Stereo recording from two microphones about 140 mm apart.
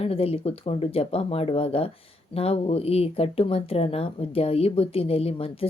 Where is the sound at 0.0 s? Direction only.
45° left (ahead or behind).